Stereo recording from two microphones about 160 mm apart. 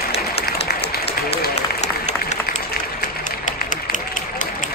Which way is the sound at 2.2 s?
65° left (ahead or behind).